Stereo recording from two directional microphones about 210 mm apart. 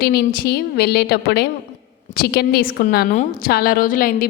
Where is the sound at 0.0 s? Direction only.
50° left (ahead or behind).